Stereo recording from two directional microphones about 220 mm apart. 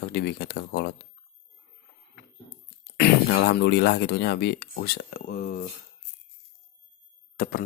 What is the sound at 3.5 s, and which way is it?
Speech, 50° left (ahead or behind).